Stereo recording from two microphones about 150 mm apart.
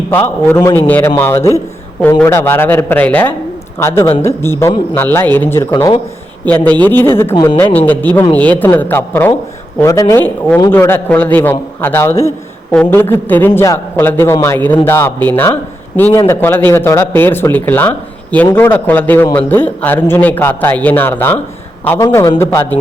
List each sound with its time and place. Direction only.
0.1 s a man's voice: 15° left (ahead or behind)
5.7 s speech: 25° left (ahead or behind)
6.4 s speech: 10° left (ahead or behind)